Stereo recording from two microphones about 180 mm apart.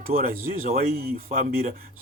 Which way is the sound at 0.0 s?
55° right (ahead or behind).